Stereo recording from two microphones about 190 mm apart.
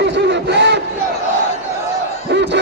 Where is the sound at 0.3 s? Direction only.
65° right (ahead or behind).